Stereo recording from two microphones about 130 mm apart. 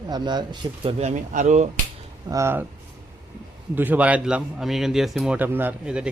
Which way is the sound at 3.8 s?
10° right (ahead or behind).